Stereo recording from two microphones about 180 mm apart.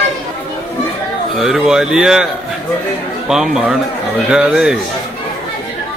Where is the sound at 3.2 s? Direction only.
Centre (ahead or behind).